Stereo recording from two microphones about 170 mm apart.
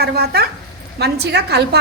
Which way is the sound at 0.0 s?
65° right (ahead or behind).